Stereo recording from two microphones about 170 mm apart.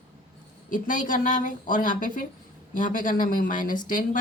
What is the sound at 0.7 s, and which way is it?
Speech, 50° left (ahead or behind).